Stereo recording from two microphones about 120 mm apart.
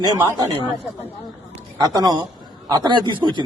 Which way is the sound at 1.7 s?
35° right (ahead or behind).